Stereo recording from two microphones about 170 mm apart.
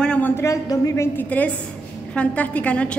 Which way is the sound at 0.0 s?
10° left (ahead or behind).